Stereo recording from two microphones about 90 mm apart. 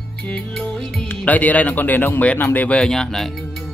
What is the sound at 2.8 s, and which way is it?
Speech, 5° left (ahead or behind).